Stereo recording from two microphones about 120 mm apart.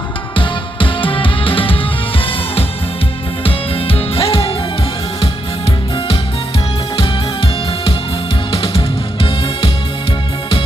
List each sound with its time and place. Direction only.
0.3 s music: 45° left (ahead or behind)
6.9 s music: 50° left (ahead or behind)